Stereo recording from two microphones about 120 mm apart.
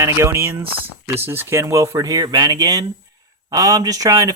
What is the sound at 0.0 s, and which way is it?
Speech, 25° right (ahead or behind).